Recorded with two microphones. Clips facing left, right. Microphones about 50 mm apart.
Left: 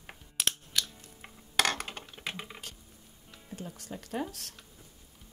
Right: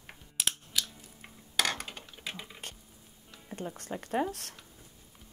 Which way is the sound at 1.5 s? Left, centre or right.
Left.